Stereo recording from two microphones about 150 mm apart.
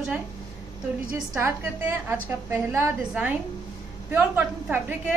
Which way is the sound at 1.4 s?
15° right (ahead or behind).